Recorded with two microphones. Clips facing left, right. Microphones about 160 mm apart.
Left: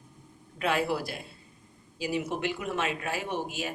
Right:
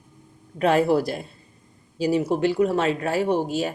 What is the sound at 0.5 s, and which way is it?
Speech, 40° right (ahead or behind).